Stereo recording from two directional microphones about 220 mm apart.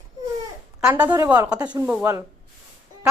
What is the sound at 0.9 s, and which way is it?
Speech, 20° right (ahead or behind).